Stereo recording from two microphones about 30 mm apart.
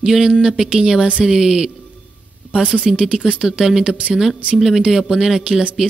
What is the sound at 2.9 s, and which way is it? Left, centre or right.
Speech, right.